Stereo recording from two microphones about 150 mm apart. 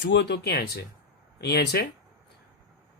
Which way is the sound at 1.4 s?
90° left.